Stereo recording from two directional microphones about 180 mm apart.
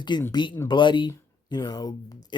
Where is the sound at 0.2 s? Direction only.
20° left (ahead or behind).